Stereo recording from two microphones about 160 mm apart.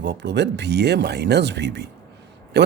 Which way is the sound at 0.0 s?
90° right.